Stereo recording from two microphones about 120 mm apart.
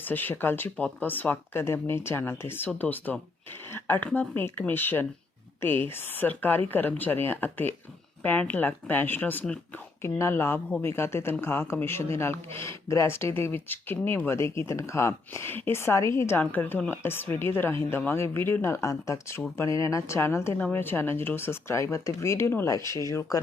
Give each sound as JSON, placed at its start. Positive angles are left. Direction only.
{"t": 0.0, "sound": "speech", "side_deg": 15}